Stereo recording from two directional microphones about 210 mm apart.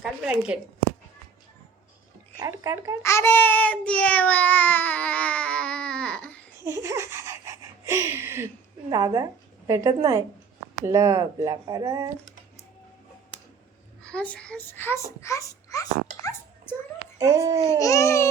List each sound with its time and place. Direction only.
0.0 s a woman's voice: 5° right (ahead or behind)
2.4 s speech: 15° right (ahead or behind)
3.0 s child singing: 15° left (ahead or behind)
6.7 s laughter: 15° right (ahead or behind)
8.9 s a woman's voice: 20° right (ahead or behind)
14.0 s child singing: 5° left (ahead or behind)
17.2 s speech: 15° right (ahead or behind)
17.7 s child singing: 15° left (ahead or behind)